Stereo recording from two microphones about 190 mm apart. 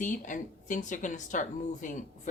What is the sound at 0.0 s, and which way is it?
A woman's voice, 40° left (ahead or behind).